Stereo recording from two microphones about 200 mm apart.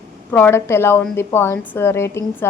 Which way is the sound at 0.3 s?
10° left (ahead or behind).